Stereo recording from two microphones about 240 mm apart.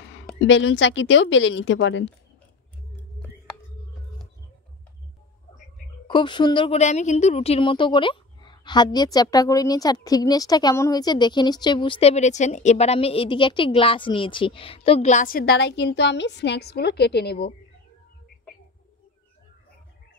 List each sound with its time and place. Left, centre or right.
0.4 s a woman's voice: left
6.0 s a woman's voice: centre; by 17.6 s left